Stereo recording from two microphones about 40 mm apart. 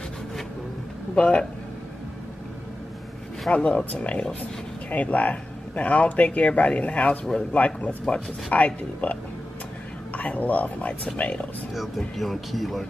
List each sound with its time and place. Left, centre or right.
1.1 s speech: left
3.5 s speech: left
12.2 s speech: centre